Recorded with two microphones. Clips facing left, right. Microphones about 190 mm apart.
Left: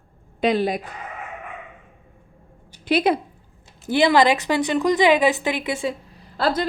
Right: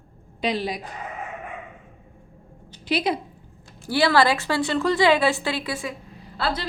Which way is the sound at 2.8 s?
55° left (ahead or behind).